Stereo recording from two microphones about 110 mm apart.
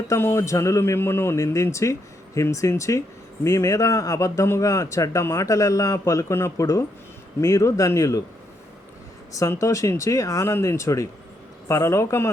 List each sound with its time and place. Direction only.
0.1 s speech: 25° left (ahead or behind)
9.3 s speech: 30° left (ahead or behind)